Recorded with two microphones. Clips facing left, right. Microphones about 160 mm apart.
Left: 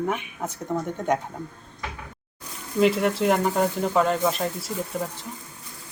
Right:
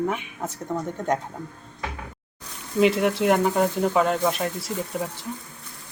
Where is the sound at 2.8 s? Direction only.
Centre (ahead or behind).